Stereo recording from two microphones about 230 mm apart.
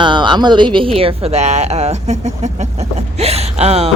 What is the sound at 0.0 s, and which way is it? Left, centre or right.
Speech, centre.